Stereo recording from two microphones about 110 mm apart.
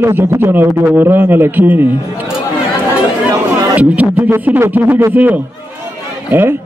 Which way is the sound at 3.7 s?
15° right (ahead or behind).